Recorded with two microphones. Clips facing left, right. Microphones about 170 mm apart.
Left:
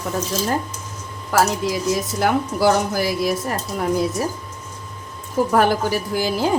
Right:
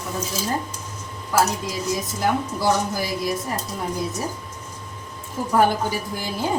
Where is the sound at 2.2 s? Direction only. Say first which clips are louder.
Left 4 dB; 80° left.